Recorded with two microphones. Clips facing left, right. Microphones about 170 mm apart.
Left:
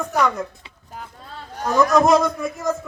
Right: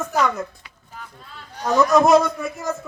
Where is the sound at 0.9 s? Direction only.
45° left (ahead or behind).